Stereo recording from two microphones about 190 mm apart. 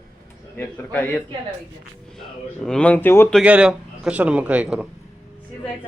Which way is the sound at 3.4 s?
5° right (ahead or behind).